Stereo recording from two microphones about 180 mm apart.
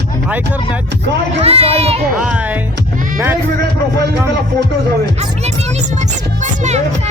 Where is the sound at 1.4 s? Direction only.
35° right (ahead or behind).